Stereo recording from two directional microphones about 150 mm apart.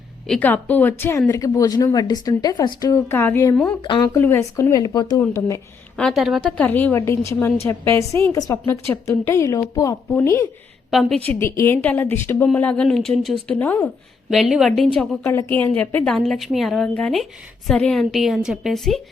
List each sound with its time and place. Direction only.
0.3 s a woman's voice: 10° left (ahead or behind)
3.8 s speech: 35° left (ahead or behind)
4.1 s a woman's voice: 15° left (ahead or behind)
6.0 s a woman's voice: centre (ahead or behind); by 10.5 s 20° left (ahead or behind)
10.9 s a woman's voice: 5° left (ahead or behind)
11.3 s a woman's voice: 15° left (ahead or behind)
14.3 s a woman's voice: 5° right (ahead or behind)
14.9 s a woman's voice: 10° left (ahead or behind)